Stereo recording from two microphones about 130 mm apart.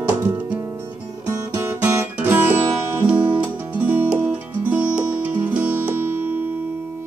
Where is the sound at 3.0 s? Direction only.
10° right (ahead or behind).